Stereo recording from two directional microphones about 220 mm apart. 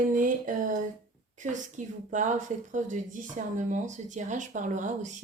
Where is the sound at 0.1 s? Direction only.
35° right (ahead or behind).